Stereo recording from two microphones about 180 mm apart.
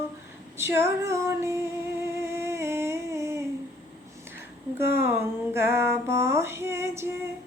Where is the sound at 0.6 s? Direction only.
15° right (ahead or behind).